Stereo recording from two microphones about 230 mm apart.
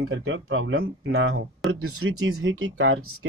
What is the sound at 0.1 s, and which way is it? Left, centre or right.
Speech, right.